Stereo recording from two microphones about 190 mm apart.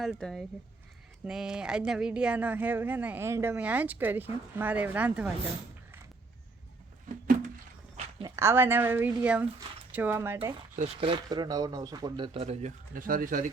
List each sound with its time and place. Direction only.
0.0 s speech: centre (ahead or behind)
8.2 s speech: 15° right (ahead or behind)
10.8 s speech: 30° right (ahead or behind)
12.9 s speech: 45° right (ahead or behind)